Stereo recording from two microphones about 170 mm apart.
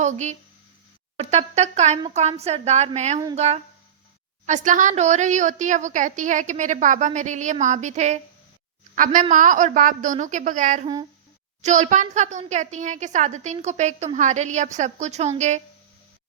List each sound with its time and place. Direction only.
0.0 s a woman's voice: 45° right (ahead or behind)
9.3 s a woman's voice: 50° right (ahead or behind)